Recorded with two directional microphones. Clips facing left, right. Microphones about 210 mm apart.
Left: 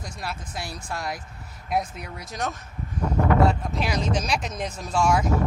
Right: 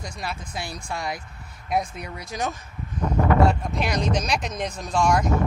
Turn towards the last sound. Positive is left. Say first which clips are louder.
# right 1 dB
turn(degrees=5)  # may be behind; listen again after turning